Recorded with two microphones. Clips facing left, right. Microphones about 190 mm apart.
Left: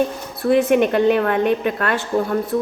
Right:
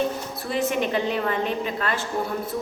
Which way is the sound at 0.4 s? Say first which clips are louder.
Left 10 dB; 55° left (ahead or behind).